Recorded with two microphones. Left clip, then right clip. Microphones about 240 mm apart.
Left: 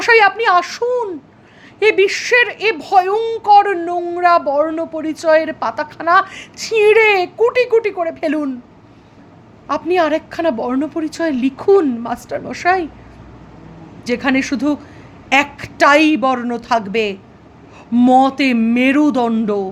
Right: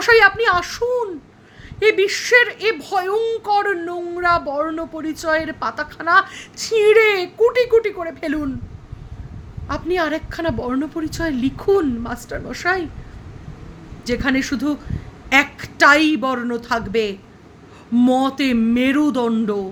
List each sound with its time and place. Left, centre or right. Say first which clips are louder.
0.0 s speech: left 2 dB; right
9.6 s speech: left 5 dB; centre
14.0 s speech: left 3 dB; right